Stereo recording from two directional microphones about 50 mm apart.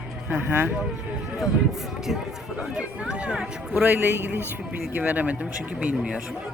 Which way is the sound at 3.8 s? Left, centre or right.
Right.